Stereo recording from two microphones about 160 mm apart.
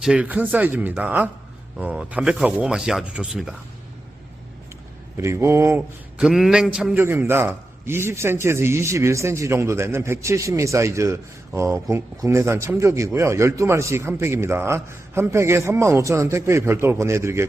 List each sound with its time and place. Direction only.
0.0 s a man's voice: 5° right (ahead or behind)
5.1 s a man's voice: 15° right (ahead or behind)
6.1 s a man's voice: centre (ahead or behind)